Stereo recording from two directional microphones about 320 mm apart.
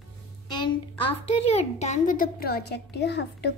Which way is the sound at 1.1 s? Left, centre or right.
Centre.